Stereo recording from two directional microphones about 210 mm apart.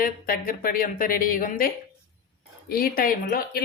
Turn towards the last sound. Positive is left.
turn(degrees=45)  # may be behind; listen again after turning